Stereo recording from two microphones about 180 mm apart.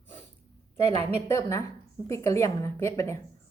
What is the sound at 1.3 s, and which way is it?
Speech, 15° left (ahead or behind).